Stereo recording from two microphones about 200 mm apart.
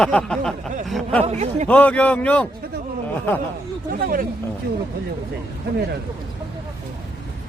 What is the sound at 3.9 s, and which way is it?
Speech, 45° right (ahead or behind).